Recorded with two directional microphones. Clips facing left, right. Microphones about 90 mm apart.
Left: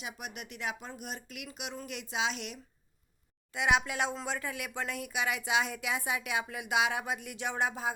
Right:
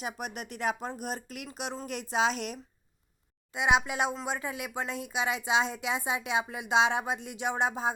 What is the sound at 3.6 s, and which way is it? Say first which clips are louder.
Speech: right 2 dB; 20° right (ahead or behind).